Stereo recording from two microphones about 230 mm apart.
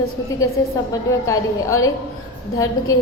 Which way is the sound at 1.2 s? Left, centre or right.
Centre.